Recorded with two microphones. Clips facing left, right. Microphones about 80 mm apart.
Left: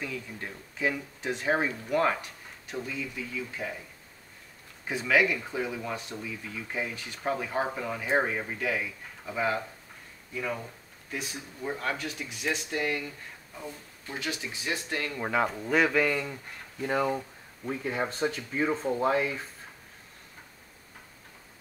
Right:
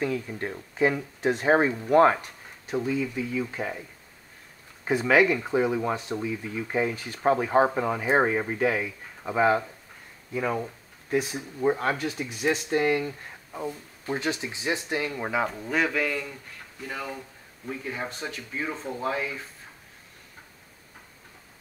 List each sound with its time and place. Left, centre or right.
0.0 s speech: right
4.8 s speech: right
11.7 s speech: right; by 16.3 s centre
16.8 s speech: left
17.9 s speech: centre